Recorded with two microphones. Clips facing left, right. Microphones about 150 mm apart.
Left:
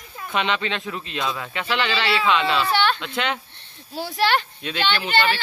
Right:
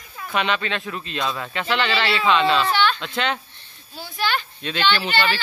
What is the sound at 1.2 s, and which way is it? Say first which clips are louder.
A child's voice: right 1 dB; 5° left (ahead or behind).